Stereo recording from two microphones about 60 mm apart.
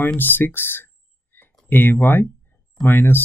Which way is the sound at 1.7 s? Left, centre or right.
Left.